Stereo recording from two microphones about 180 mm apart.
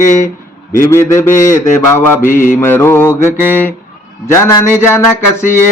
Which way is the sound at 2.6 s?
15° left (ahead or behind).